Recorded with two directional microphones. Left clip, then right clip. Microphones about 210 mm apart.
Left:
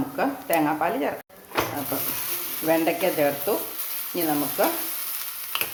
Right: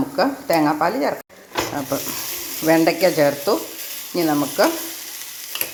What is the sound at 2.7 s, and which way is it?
Speech, 25° right (ahead or behind).